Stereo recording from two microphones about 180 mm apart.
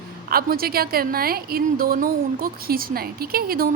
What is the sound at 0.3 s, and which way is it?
A woman's voice, 55° right (ahead or behind).